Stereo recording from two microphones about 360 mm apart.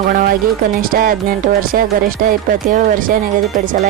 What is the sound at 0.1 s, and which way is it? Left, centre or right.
Music, right.